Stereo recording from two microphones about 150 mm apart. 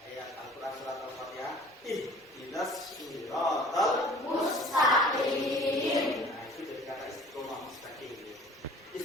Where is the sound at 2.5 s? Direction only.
Centre (ahead or behind).